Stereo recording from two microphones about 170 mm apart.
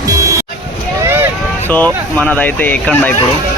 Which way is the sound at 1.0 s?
15° right (ahead or behind).